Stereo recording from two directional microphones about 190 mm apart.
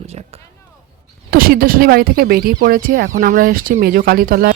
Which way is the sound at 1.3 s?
50° right (ahead or behind).